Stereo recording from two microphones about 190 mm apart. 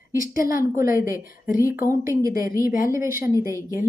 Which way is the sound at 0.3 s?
50° left (ahead or behind).